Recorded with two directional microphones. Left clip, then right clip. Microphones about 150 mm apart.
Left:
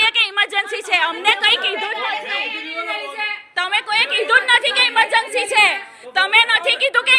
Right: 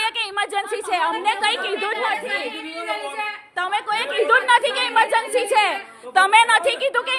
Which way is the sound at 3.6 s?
25° right (ahead or behind).